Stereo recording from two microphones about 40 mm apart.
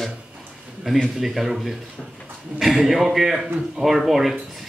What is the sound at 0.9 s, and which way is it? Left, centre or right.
Speech, centre.